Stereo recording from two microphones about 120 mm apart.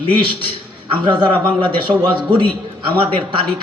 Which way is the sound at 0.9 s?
40° right (ahead or behind).